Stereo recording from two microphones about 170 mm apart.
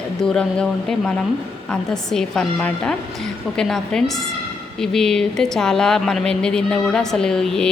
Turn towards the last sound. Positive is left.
turn(degrees=5)  # may be behind; listen again after turning